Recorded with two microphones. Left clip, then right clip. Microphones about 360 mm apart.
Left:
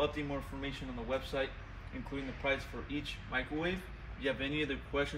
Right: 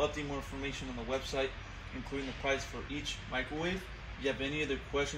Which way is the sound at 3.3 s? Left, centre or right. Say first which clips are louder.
Left 1 dB; centre.